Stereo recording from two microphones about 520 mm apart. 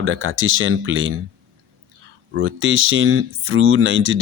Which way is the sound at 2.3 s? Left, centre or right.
Right.